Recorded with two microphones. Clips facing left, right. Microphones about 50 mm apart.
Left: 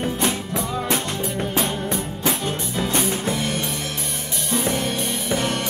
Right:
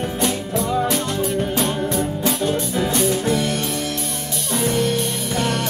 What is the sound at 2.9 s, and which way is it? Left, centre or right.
Music, left.